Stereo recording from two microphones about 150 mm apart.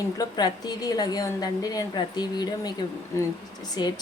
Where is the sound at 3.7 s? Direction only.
25° left (ahead or behind).